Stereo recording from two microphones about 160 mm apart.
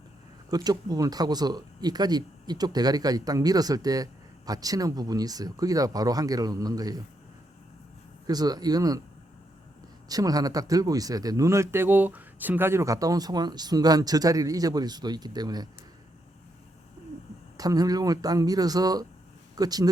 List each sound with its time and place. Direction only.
0.5 s speech: 25° right (ahead or behind)
8.3 s speech: 25° right (ahead or behind)
10.1 s speech: 25° right (ahead or behind)
17.6 s speech: 25° right (ahead or behind)